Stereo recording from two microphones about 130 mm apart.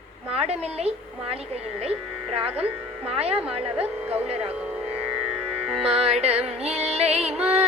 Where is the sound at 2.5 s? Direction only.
10° right (ahead or behind).